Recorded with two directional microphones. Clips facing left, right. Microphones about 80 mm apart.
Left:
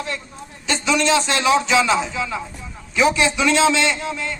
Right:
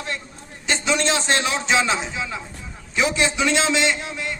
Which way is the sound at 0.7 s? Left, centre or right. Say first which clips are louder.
Left 3 dB; right.